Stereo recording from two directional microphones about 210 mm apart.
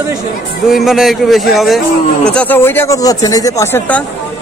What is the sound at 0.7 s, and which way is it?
A man's voice, centre (ahead or behind).